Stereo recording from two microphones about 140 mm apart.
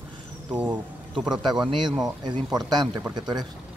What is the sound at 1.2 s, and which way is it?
Speech, 5° right (ahead or behind).